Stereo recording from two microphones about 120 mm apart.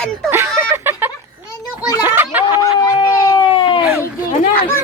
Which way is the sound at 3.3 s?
45° left (ahead or behind).